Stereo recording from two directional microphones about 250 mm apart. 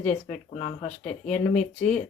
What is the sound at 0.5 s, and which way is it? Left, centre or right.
Speech, left.